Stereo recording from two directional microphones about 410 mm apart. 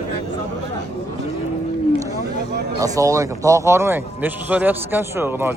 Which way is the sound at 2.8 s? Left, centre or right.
Centre.